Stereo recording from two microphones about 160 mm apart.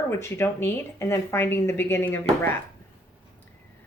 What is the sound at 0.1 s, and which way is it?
A woman's voice, 15° left (ahead or behind).